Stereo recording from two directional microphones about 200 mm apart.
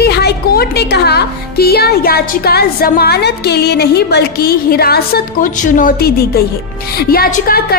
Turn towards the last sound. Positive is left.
turn(degrees=50)  # may be behind; listen again after turning